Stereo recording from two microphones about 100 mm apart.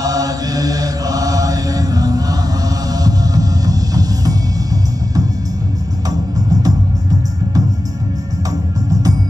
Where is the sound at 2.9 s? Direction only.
40° right (ahead or behind).